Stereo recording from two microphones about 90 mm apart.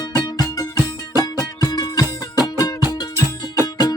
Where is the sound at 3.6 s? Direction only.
45° left (ahead or behind).